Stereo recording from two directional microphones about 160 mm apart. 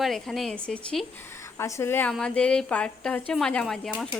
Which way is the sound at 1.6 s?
15° left (ahead or behind).